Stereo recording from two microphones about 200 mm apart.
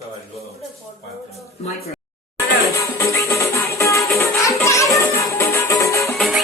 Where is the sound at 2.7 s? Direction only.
15° left (ahead or behind).